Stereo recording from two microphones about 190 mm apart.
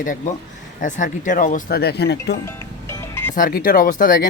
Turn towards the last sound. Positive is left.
turn(degrees=50)  # may be behind; listen again after turning